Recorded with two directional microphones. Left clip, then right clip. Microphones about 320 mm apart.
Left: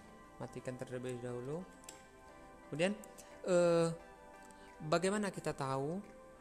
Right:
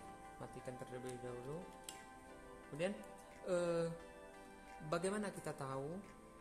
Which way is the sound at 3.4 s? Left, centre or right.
Left.